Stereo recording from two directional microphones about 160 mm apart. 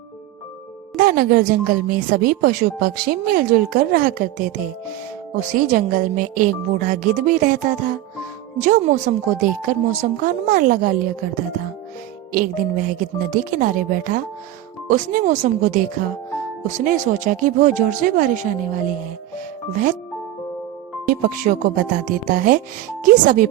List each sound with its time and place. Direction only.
0.9 s a woman's voice: 65° right (ahead or behind)
12.3 s a woman's voice: 55° right (ahead or behind)
21.1 s a woman's voice: 55° right (ahead or behind)